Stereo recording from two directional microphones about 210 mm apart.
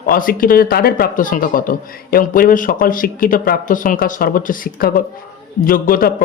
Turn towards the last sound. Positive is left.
turn(degrees=40)  # may be behind; listen again after turning